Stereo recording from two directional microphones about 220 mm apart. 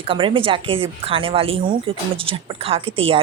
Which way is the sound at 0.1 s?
25° right (ahead or behind).